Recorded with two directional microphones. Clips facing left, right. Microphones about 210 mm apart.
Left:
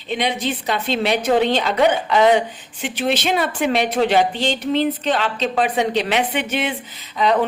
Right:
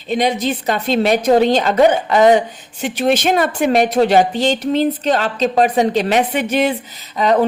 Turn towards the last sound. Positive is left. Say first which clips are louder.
# right 4 dB
turn(degrees=-45)  # may be behind; listen again after turning